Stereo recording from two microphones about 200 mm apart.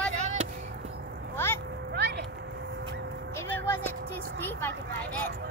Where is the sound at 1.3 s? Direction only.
10° left (ahead or behind).